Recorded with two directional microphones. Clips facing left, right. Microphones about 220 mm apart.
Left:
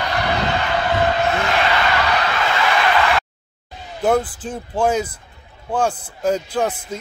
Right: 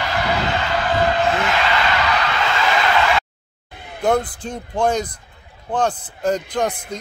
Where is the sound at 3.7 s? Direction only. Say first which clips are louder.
Left 2 dB; 55° right (ahead or behind).